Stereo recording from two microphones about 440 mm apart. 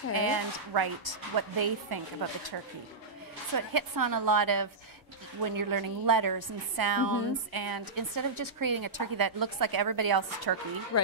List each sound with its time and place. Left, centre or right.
0.1 s a woman's voice: right
3.5 s a woman's voice: right